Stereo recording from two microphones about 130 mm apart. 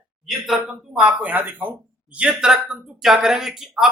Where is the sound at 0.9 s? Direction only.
10° right (ahead or behind).